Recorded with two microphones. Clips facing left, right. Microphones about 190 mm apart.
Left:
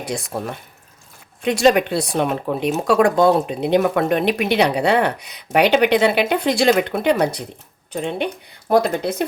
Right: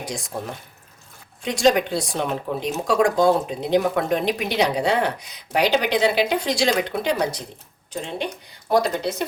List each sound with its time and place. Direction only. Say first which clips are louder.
0.0 s speech: left 5 dB; 65° left (ahead or behind)
1.4 s speech: left 3 dB; 60° left (ahead or behind)